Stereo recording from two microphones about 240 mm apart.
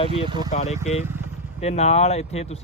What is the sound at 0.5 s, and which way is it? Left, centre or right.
Speech, left.